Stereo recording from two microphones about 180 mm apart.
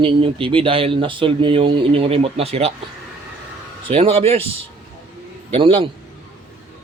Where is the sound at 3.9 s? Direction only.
35° right (ahead or behind).